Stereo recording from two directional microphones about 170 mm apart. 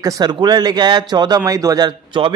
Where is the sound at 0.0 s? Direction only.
20° right (ahead or behind).